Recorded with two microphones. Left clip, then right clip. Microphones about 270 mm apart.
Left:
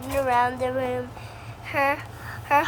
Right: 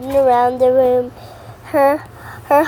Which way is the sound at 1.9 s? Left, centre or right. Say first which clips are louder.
Right 9 dB; right.